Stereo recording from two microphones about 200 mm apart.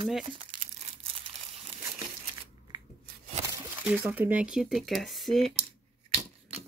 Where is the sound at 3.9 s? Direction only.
10° right (ahead or behind).